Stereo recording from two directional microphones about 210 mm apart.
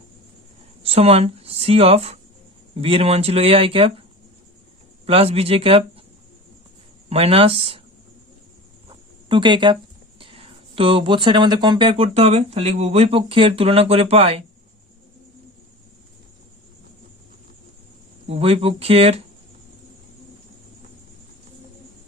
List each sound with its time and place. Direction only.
0.8 s speech: 30° right (ahead or behind)
5.0 s speech: 30° right (ahead or behind)
7.1 s speech: 30° right (ahead or behind)
9.3 s speech: 20° right (ahead or behind)
18.3 s speech: 30° right (ahead or behind)